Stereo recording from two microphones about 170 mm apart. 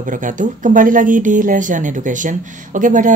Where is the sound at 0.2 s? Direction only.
50° right (ahead or behind).